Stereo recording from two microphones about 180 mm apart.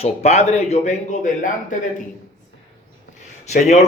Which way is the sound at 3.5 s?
40° left (ahead or behind).